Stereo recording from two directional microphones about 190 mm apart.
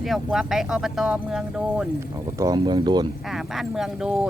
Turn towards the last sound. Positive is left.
turn(degrees=-5)  # may be behind; listen again after turning